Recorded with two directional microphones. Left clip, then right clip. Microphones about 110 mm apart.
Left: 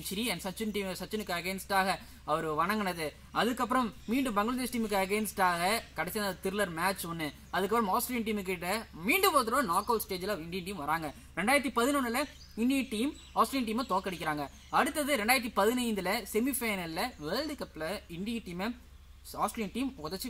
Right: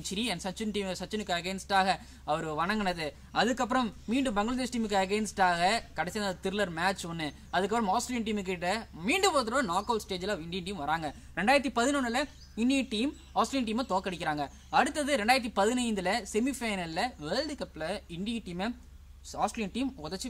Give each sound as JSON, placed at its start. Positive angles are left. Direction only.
{"t": 0.6, "sound": "a woman's voice", "side_deg": -35}